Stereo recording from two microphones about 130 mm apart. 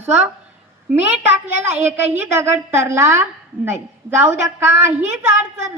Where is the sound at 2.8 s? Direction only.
20° right (ahead or behind).